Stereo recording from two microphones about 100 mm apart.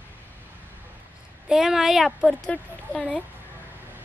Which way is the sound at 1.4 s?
5° right (ahead or behind).